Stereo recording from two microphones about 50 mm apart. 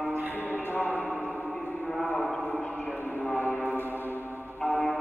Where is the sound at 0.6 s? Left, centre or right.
Left.